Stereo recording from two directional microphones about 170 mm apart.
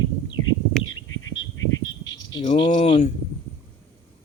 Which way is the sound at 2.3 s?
25° left (ahead or behind).